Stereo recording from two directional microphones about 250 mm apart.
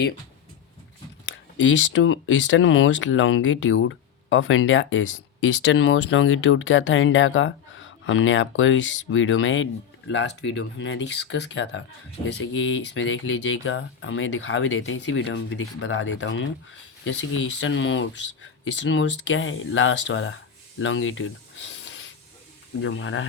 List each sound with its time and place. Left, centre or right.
1.2 s speech: left